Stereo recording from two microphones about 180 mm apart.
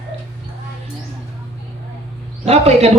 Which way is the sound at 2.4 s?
35° right (ahead or behind).